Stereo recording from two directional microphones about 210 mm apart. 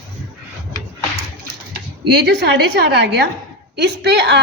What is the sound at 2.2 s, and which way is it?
A woman's voice, 50° right (ahead or behind).